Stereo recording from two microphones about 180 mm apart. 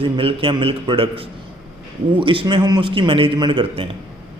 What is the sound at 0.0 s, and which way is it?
A man's voice, 30° right (ahead or behind).